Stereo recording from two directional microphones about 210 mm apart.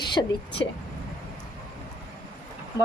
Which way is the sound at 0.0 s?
20° left (ahead or behind).